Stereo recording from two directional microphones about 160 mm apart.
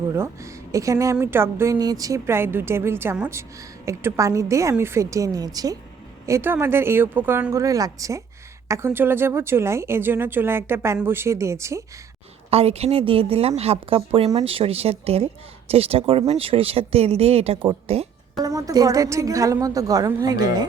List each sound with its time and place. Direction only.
0.7 s a woman's voice: 20° right (ahead or behind)
12.5 s speech: 40° right (ahead or behind)
18.3 s a woman's voice: 20° right (ahead or behind)